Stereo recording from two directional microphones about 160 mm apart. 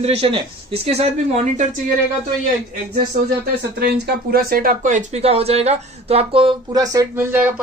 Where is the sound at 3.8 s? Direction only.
70° right (ahead or behind); by 7.0 s 25° right (ahead or behind).